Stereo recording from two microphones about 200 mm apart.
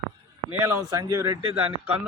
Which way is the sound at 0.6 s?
20° right (ahead or behind).